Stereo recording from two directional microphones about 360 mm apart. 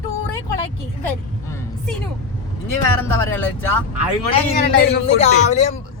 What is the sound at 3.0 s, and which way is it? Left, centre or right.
Speech, centre.